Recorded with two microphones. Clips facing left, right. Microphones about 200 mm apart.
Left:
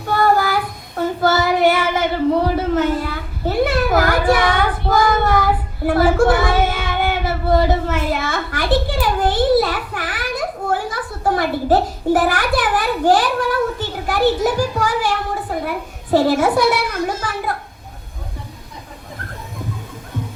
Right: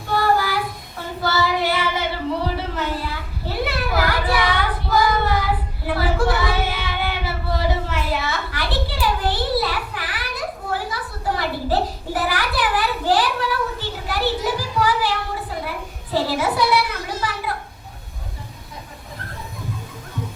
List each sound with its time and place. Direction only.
0.1 s child singing: 50° left (ahead or behind)
2.5 s children playing: 50° left (ahead or behind)
15.6 s a sound: 50° left (ahead or behind)